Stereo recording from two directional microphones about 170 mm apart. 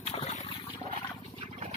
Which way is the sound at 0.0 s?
40° left (ahead or behind).